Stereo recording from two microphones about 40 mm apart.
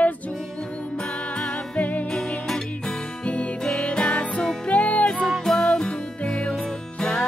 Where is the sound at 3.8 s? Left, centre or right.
Left.